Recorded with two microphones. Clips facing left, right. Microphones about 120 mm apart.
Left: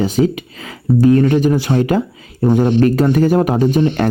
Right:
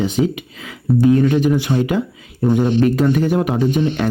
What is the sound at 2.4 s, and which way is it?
Speech, 30° left (ahead or behind).